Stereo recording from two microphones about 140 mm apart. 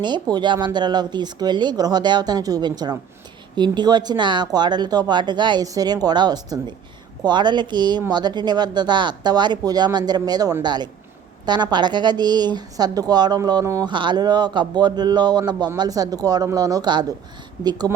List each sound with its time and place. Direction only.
0.0 s speech: 30° right (ahead or behind)